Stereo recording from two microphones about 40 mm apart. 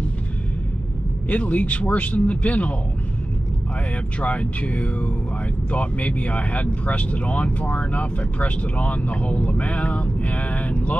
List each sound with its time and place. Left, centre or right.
1.3 s speech: left
4.2 s speech: left